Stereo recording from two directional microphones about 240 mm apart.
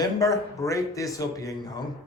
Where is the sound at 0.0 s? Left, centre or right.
Centre.